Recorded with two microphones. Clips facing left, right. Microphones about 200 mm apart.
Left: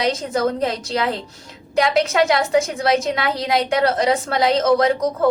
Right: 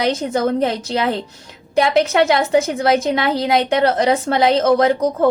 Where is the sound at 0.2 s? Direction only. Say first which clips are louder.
Right 3 dB; 30° right (ahead or behind).